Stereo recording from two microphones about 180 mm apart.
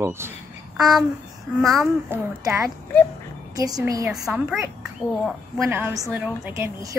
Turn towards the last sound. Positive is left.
turn(degrees=-10)  # may be behind; listen again after turning